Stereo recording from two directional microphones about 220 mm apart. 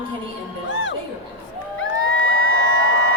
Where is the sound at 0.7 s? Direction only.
55° left (ahead or behind).